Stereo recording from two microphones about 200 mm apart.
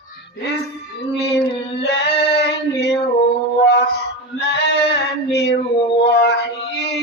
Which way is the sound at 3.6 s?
55° left (ahead or behind).